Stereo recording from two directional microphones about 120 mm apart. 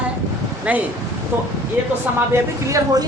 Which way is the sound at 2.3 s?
25° right (ahead or behind).